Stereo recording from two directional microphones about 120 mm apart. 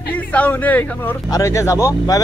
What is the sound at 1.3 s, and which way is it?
Speech, 25° left (ahead or behind).